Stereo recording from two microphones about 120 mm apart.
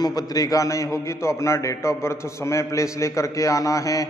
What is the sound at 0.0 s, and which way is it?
A man's voice, 30° left (ahead or behind).